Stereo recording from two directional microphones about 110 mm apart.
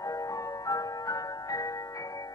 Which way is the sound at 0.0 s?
30° left (ahead or behind).